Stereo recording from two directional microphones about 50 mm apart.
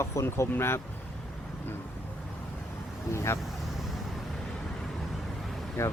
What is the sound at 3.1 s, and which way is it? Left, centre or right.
Speech, left.